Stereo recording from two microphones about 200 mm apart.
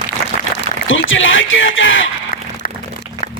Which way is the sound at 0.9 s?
75° left (ahead or behind).